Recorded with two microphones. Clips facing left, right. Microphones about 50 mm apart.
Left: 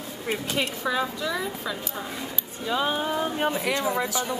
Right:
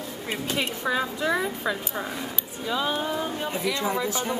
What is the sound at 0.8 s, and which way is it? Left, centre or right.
A woman's voice, centre.